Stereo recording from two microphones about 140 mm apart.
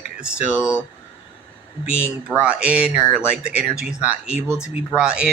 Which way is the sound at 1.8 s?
10° right (ahead or behind).